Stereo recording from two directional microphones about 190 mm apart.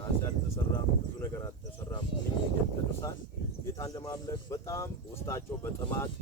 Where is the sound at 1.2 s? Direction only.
15° left (ahead or behind).